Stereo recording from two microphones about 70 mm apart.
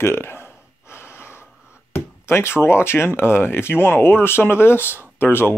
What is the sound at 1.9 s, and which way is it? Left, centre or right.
Speech, left.